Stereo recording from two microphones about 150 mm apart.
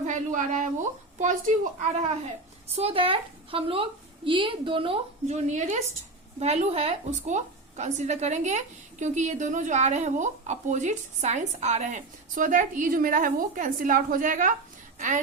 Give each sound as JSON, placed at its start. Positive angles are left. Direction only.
{"t": 0.0, "sound": "a woman's voice", "side_deg": -60}
{"t": 2.7, "sound": "a woman's voice", "side_deg": -40}